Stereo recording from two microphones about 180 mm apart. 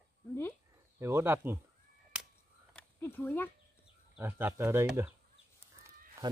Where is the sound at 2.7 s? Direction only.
10° left (ahead or behind).